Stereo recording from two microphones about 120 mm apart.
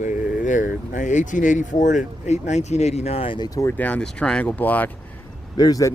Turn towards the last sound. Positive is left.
turn(degrees=30)  # may be behind; listen again after turning